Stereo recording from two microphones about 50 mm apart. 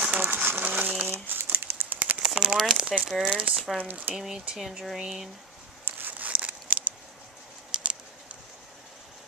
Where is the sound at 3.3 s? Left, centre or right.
Right.